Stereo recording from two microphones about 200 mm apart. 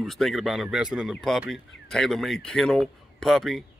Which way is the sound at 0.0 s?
Centre (ahead or behind).